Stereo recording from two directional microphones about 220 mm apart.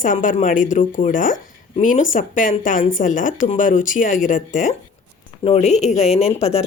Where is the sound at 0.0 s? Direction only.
35° left (ahead or behind).